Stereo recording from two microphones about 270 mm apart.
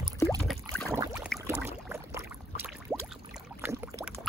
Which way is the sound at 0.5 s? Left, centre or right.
Centre.